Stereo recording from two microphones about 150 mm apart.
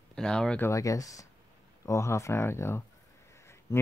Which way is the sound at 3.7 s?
20° left (ahead or behind).